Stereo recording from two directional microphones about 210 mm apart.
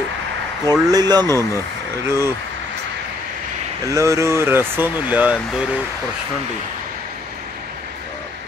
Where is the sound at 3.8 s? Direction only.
15° right (ahead or behind).